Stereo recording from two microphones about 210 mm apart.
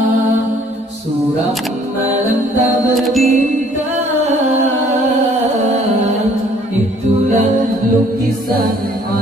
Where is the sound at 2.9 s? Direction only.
Centre (ahead or behind).